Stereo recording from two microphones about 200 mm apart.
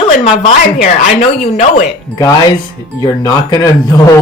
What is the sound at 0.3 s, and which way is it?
Speech, 35° left (ahead or behind).